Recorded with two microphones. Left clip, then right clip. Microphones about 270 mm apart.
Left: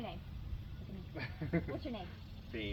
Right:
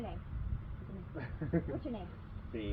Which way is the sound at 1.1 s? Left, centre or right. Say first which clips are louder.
Right 2 dB; left.